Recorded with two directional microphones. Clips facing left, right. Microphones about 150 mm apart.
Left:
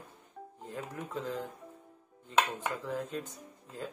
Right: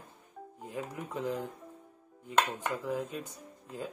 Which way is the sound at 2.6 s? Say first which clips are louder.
Right 2 dB; 15° right (ahead or behind).